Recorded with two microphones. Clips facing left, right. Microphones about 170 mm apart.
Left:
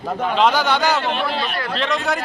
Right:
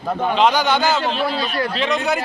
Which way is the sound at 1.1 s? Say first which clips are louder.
Right 1 dB; 60° left (ahead or behind).